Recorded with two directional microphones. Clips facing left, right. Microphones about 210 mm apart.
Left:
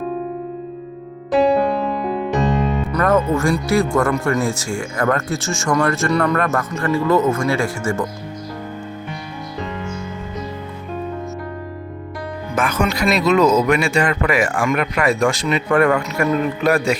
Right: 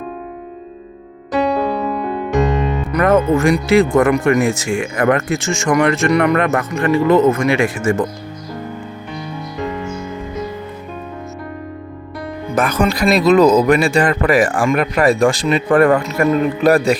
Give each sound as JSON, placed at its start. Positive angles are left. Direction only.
{"t": 1.3, "sound": "music", "side_deg": 0}
{"t": 2.9, "sound": "speech", "side_deg": -20}
{"t": 12.5, "sound": "speech", "side_deg": -35}